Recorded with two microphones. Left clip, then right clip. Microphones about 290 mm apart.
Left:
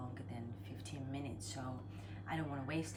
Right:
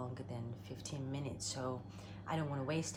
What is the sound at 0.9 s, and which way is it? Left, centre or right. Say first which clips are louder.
A woman's voice: right 2 dB; centre.